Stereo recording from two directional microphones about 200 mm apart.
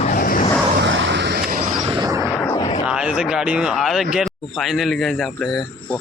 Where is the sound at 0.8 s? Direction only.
65° right (ahead or behind).